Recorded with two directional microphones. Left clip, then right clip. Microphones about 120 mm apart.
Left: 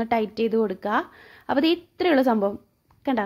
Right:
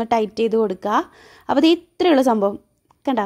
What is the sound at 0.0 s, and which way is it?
A woman's voice, 55° right (ahead or behind).